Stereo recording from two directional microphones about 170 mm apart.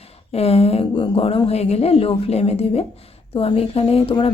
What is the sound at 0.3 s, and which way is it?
A woman's voice, 35° left (ahead or behind).